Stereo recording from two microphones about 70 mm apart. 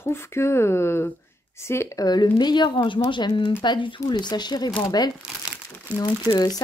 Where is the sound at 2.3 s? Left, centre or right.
Left.